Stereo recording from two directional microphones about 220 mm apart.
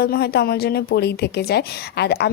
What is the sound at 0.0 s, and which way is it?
A woman's voice, 45° left (ahead or behind).